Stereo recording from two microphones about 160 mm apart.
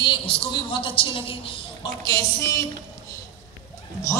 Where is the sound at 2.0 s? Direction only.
20° left (ahead or behind).